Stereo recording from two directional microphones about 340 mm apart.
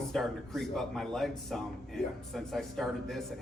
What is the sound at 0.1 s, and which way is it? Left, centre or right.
Speech, centre.